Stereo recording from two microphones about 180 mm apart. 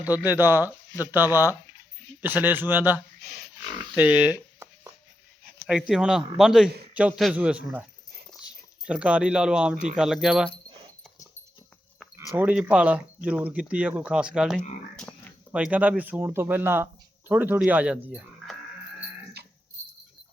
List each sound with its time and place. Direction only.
0.0 s speech: 10° right (ahead or behind)
3.7 s speech: 25° right (ahead or behind)
3.9 s a sound: 5° right (ahead or behind)
5.9 s a man's voice: 5° right (ahead or behind)
12.1 s speech: 10° right (ahead or behind); by 15.1 s 5° left (ahead or behind)
15.5 s speech: 5° right (ahead or behind)